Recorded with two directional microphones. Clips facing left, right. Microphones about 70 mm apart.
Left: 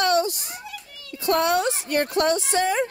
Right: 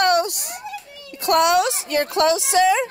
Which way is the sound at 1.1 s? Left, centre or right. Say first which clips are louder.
Right 4 dB; right.